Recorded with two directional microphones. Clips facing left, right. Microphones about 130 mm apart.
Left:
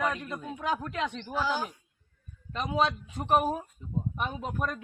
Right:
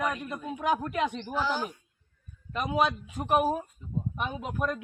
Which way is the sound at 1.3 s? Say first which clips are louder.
Left 1 dB; 10° left (ahead or behind).